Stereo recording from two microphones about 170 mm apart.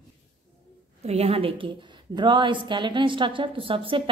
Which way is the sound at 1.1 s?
35° right (ahead or behind).